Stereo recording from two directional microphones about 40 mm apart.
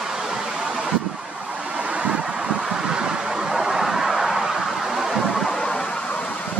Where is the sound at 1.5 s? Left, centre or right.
Right; by 5.4 s centre.